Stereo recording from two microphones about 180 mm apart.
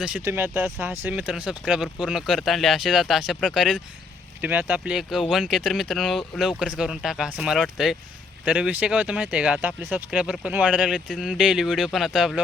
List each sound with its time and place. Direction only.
0.0 s speech: 10° right (ahead or behind)